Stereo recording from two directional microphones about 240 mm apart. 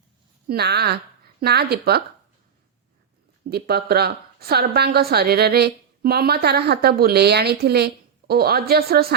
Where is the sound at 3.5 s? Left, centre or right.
Right.